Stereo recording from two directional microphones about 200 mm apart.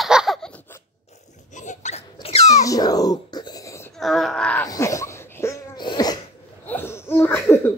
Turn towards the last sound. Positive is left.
turn(degrees=10)  # may be behind; listen again after turning